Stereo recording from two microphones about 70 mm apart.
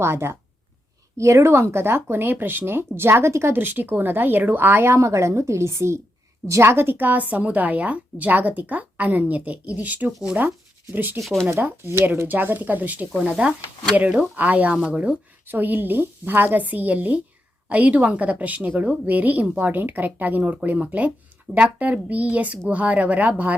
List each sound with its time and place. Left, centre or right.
0.0 s speech: right